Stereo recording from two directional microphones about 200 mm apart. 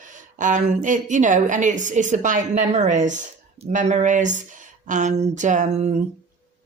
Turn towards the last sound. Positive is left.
turn(degrees=-35)  # may be behind; listen again after turning